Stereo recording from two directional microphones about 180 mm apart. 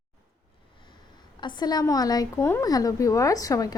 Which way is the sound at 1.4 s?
25° left (ahead or behind).